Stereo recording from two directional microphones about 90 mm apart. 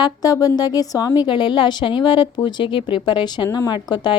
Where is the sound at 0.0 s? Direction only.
45° left (ahead or behind).